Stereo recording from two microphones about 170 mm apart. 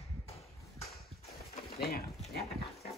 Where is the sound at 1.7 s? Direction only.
65° left (ahead or behind).